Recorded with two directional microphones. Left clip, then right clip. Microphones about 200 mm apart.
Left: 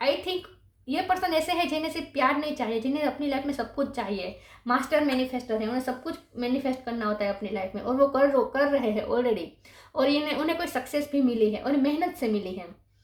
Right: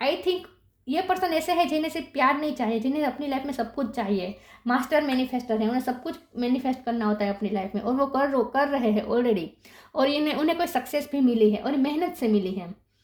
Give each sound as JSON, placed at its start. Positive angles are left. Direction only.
{"t": 0.9, "sound": "a woman's voice", "side_deg": -50}